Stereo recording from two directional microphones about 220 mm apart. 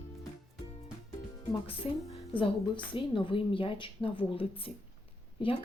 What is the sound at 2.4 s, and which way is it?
A woman's voice, 20° left (ahead or behind).